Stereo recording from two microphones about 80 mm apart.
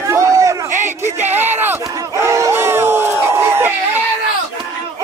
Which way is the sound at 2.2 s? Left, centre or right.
Right.